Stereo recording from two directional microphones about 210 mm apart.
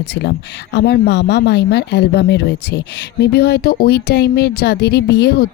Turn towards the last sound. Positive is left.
turn(degrees=50)  # may be behind; listen again after turning